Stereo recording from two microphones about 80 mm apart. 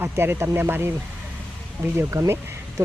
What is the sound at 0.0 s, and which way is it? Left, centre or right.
Speech, right.